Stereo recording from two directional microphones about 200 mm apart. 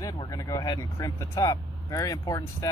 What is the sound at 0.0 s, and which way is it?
Speech, 20° left (ahead or behind).